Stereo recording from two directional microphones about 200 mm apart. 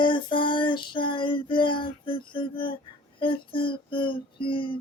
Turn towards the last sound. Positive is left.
turn(degrees=25)  # may be behind; listen again after turning